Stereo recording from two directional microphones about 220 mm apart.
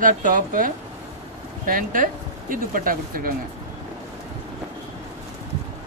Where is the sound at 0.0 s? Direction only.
35° right (ahead or behind).